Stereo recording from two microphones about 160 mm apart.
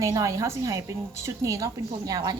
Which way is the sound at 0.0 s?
20° right (ahead or behind).